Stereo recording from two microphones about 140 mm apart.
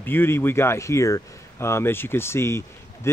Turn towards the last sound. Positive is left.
turn(degrees=20)  # may be behind; listen again after turning